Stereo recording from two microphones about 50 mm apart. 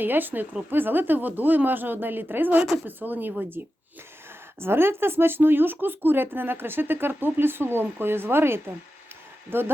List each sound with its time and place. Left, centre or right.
0.0 s a woman's voice: right
4.6 s speech: right